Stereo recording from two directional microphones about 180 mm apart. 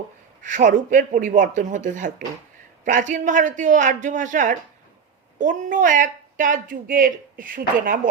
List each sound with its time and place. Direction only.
0.4 s speech: 45° right (ahead or behind)